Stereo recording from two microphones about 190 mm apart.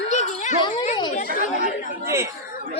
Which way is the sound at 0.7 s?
40° left (ahead or behind).